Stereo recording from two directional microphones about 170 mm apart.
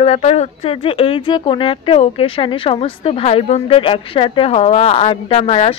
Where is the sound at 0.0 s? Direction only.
35° left (ahead or behind).